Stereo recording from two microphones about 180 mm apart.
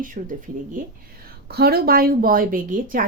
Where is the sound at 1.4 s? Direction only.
60° right (ahead or behind).